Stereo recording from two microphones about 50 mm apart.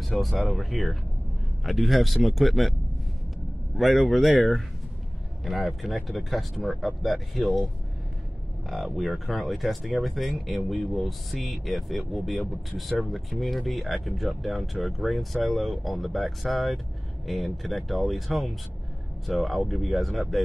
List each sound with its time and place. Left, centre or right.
0.1 s speech: centre
3.7 s speech: centre
8.6 s speech: centre